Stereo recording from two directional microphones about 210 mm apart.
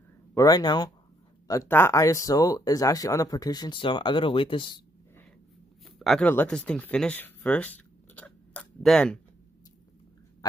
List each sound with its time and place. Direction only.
0.3 s speech: 15° left (ahead or behind)
5.9 s speech: centre (ahead or behind)